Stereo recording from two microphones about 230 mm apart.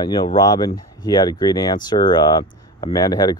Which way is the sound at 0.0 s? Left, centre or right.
Centre.